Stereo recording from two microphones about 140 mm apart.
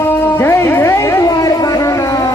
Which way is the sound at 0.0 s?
15° left (ahead or behind).